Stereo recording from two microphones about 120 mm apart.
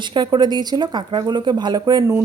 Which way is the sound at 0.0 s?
40° right (ahead or behind).